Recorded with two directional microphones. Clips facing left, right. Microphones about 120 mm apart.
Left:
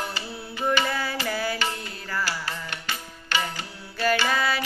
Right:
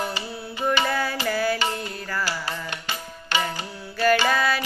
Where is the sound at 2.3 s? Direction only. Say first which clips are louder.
Right 2 dB; 20° right (ahead or behind).